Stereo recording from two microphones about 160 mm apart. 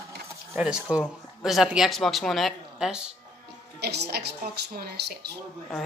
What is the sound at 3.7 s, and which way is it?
Speech, 90° right.